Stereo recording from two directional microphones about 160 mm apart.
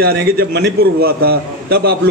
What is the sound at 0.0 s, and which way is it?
A man's voice, 75° right (ahead or behind).